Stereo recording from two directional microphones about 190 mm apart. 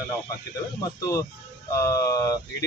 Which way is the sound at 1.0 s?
15° left (ahead or behind).